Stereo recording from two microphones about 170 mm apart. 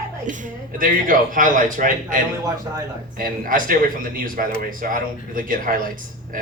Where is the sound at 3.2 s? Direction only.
55° right (ahead or behind).